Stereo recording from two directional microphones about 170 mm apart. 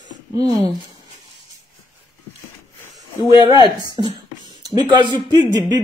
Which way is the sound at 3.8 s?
25° right (ahead or behind).